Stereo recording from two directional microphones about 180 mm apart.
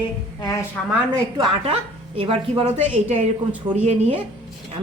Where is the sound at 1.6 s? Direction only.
30° right (ahead or behind).